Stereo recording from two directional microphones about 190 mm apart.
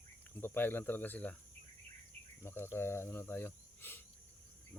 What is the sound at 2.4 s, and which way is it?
Speech, 15° left (ahead or behind).